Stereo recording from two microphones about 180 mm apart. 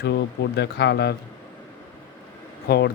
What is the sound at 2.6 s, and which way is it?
Speech, 65° left (ahead or behind).